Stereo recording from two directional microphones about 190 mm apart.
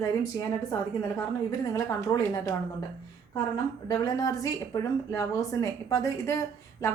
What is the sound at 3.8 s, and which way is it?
A woman's voice, 20° left (ahead or behind).